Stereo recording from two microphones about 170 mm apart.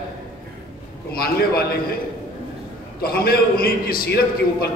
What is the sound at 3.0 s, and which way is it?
A man's voice, 65° left (ahead or behind).